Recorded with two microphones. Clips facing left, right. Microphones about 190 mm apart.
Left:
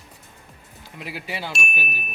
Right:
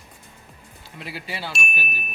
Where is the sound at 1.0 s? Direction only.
15° left (ahead or behind).